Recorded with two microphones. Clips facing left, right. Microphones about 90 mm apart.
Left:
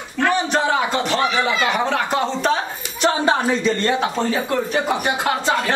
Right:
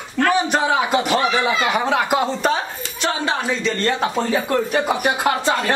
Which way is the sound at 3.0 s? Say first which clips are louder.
Left 4 dB; 30° left (ahead or behind).